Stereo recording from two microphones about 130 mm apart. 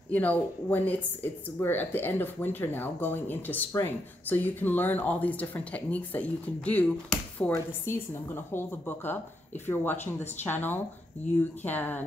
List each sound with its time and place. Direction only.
0.1 s speech: 10° left (ahead or behind)